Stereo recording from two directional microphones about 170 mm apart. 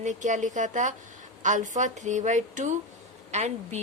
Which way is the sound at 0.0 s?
45° right (ahead or behind).